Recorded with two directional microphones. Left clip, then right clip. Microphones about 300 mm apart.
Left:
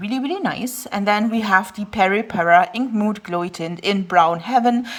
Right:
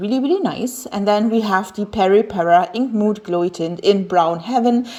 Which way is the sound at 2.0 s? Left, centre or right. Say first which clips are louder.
Right 3 dB; left.